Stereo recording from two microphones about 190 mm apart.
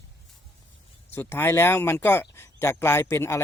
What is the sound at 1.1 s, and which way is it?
Speech, 10° left (ahead or behind).